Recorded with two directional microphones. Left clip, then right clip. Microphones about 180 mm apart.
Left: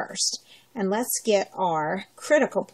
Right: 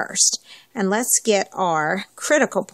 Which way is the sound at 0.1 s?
Centre (ahead or behind).